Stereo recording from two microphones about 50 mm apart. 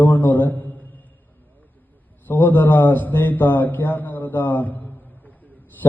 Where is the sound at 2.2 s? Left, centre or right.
Left.